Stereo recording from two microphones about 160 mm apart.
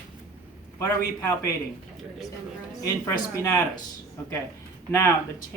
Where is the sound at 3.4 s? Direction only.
20° left (ahead or behind).